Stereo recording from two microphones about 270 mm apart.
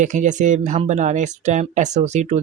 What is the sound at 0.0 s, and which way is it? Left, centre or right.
Speech, right.